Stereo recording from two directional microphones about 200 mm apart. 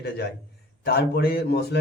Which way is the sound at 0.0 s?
55° left (ahead or behind).